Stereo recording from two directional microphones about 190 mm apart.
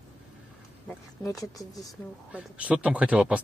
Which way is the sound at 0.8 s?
15° left (ahead or behind).